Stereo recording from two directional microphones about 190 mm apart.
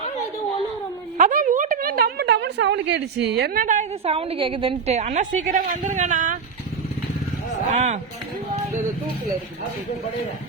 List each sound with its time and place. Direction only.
1.2 s a woman's voice: 45° right (ahead or behind)
7.7 s speech: 40° right (ahead or behind)